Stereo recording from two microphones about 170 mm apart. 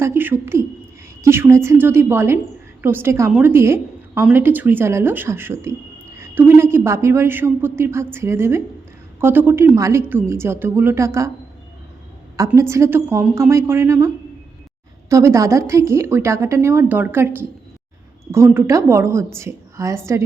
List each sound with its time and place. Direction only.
0.0 s a woman's voice: 15° right (ahead or behind)
12.5 s a woman's voice: 15° right (ahead or behind)
15.1 s a woman's voice: 20° right (ahead or behind)